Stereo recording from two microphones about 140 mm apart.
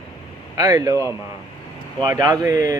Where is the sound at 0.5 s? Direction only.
25° right (ahead or behind).